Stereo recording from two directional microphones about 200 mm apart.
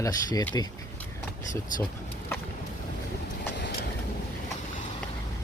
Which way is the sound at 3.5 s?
60° left (ahead or behind).